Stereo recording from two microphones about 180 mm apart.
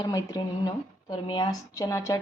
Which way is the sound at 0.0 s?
20° left (ahead or behind).